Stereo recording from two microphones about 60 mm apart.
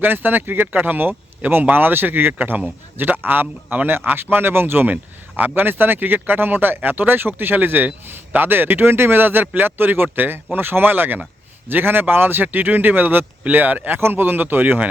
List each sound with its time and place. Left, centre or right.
0.0 s speech: right